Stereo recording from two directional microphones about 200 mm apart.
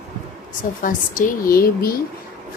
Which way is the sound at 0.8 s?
40° left (ahead or behind).